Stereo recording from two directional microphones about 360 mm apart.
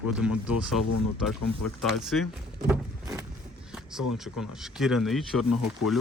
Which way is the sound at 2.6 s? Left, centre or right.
Centre.